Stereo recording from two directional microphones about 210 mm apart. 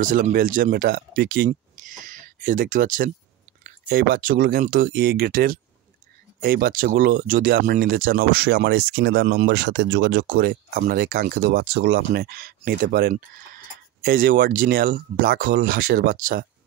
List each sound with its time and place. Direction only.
0.0 s speech: 40° right (ahead or behind)
1.5 s a sound: 35° right (ahead or behind)
3.9 s speech: 40° right (ahead or behind)